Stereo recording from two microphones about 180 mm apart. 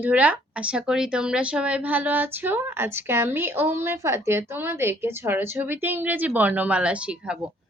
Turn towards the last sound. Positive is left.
turn(degrees=-5)  # may be behind; listen again after turning